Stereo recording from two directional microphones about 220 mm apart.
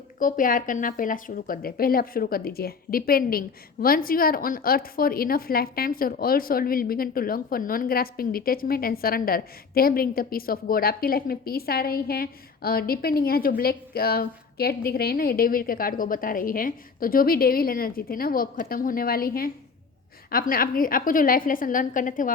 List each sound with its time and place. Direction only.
0.2 s a woman's voice: 35° left (ahead or behind)